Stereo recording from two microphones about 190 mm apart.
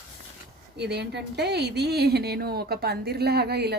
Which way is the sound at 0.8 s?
60° right (ahead or behind).